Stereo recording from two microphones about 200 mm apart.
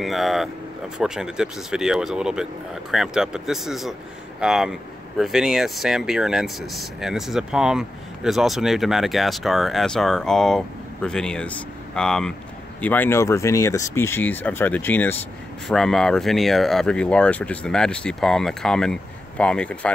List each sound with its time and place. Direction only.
0.0 s speech: centre (ahead or behind)